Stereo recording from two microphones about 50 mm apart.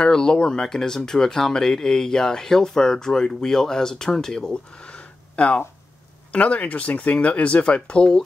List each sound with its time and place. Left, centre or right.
0.0 s speech: centre